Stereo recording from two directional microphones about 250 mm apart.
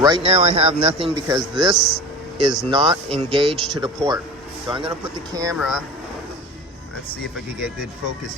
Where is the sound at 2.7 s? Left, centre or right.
Centre.